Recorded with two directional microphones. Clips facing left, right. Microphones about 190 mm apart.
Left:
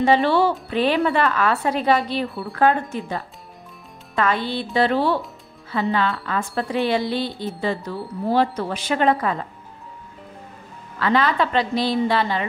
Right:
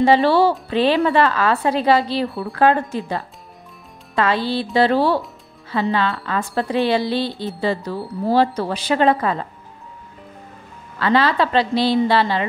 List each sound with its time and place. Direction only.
0.0 s a woman's voice: 35° right (ahead or behind)
11.0 s a woman's voice: 30° right (ahead or behind)